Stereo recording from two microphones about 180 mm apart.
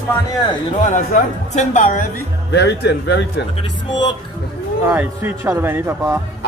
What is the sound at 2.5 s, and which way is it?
Speech, 70° left (ahead or behind).